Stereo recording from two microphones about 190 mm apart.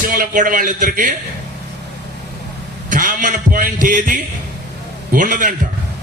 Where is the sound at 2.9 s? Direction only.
45° right (ahead or behind).